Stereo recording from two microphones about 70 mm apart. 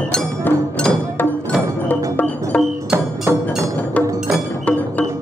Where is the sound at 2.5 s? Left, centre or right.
Centre.